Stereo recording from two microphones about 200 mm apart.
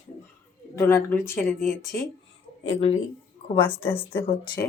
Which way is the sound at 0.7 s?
10° left (ahead or behind).